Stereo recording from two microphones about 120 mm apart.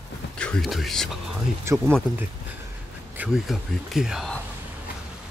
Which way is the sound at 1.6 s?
20° right (ahead or behind).